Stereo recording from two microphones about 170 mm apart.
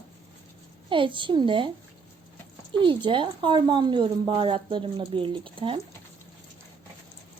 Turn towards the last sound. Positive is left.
turn(degrees=-30)  # may be behind; listen again after turning